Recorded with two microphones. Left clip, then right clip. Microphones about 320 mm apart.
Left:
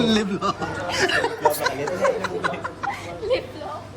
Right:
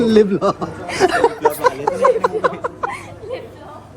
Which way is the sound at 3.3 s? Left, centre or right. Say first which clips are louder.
Left 5 dB; left.